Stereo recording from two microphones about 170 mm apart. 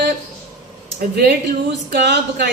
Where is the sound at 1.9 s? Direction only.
80° right.